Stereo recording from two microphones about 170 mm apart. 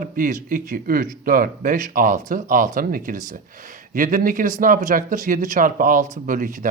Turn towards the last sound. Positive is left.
turn(degrees=-50)  # may be behind; listen again after turning